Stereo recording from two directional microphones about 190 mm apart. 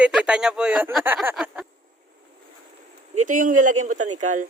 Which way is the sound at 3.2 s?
45° right (ahead or behind).